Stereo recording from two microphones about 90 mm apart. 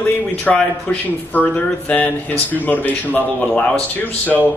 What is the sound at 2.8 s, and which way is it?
Speech, 20° left (ahead or behind).